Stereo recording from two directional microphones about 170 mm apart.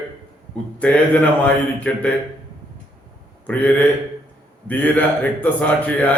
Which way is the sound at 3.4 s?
10° left (ahead or behind).